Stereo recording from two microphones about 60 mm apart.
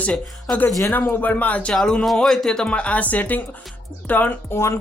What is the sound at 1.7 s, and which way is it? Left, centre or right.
Speech, centre.